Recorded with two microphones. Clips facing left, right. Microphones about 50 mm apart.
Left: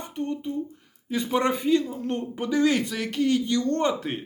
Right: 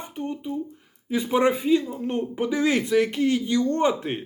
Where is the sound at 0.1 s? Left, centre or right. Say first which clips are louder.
Left 1 dB; centre.